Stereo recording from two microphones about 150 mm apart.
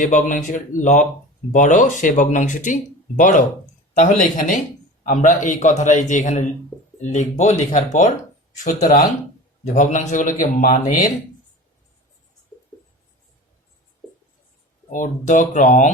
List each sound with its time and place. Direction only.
0.0 s a man's voice: 55° left (ahead or behind)
14.8 s speech: 60° left (ahead or behind)